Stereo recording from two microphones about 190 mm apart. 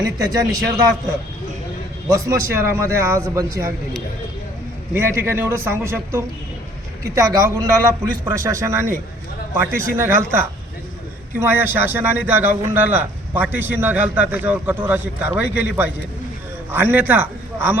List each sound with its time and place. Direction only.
0.0 s a man's voice: 20° right (ahead or behind)
2.0 s a man's voice: 15° right (ahead or behind)